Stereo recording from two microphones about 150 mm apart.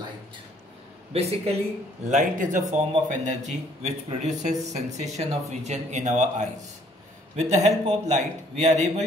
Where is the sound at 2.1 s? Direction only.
55° right (ahead or behind).